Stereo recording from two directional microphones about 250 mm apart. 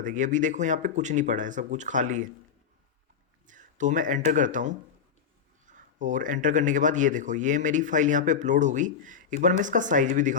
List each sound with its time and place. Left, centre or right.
0.0 s speech: right
3.4 s speech: right